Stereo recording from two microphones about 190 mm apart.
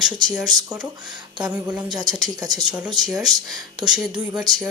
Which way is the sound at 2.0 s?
20° right (ahead or behind).